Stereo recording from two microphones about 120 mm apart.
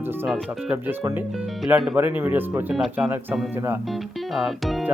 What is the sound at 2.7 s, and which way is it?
Speech, 5° right (ahead or behind).